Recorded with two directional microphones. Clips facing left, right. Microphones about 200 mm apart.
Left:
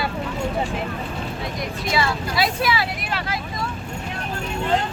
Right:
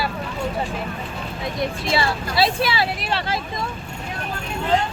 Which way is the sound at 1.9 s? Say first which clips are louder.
Left 3 dB; 30° right (ahead or behind).